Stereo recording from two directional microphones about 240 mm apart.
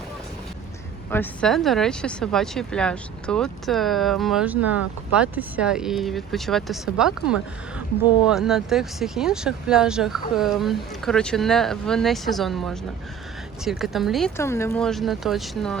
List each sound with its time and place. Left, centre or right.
1.1 s speech: centre